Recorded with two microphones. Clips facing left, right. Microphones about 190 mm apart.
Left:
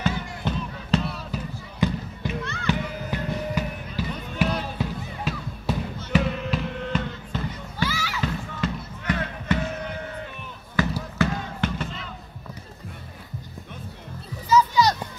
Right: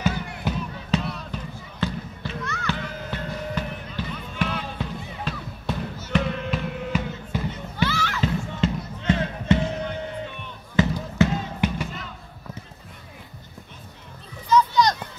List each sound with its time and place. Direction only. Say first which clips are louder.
0.0 s a sound: right 1 dB; 5° right (ahead or behind)
1.8 s basketball bounce: left 4 dB; 15° left (ahead or behind)
2.6 s music: left 5 dB; 15° left (ahead or behind)
6.1 s basketball bounce: left 1 dB; centre (ahead or behind)
7.7 s children playing: right 3 dB; 10° left (ahead or behind)
8.2 s music: right 4 dB; 25° right (ahead or behind)
10.8 s fireworks: right 3 dB; 20° right (ahead or behind)
14.5 s music: even; 5° left (ahead or behind)